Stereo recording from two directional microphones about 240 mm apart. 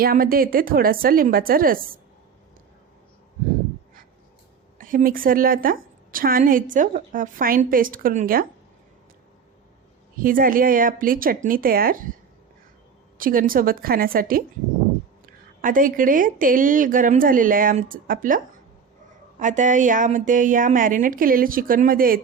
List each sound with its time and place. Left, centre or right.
0.0 s a woman's voice: right
4.8 s a woman's voice: right
10.2 s a woman's voice: right
13.1 s a woman's voice: right
15.6 s a woman's voice: right